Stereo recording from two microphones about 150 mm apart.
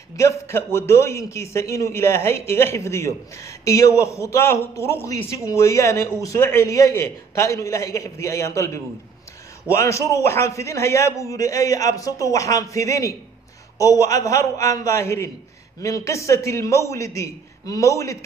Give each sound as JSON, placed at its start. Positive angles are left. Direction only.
{"t": 0.1, "sound": "a man's voice", "side_deg": 20}